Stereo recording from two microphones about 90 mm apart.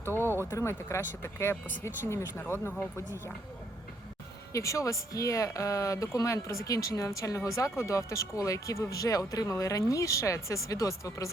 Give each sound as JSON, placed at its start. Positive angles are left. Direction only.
{"t": 0.1, "sound": "a sound", "side_deg": -25}
{"t": 0.5, "sound": "speech", "side_deg": 30}
{"t": 4.5, "sound": "speech", "side_deg": 35}